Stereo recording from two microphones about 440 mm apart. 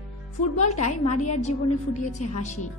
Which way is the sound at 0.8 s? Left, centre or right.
Centre.